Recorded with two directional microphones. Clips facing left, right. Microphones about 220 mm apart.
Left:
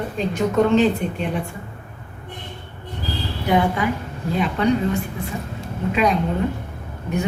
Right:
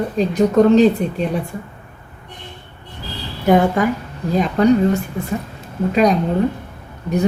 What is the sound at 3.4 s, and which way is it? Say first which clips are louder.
A woman's voice: right 5 dB; 45° right (ahead or behind).